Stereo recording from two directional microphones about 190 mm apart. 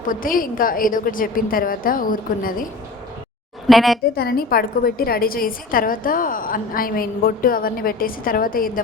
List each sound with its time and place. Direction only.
0.1 s a woman's voice: 45° left (ahead or behind)
3.7 s a woman's voice: centre (ahead or behind)
4.1 s a woman's voice: 55° left (ahead or behind)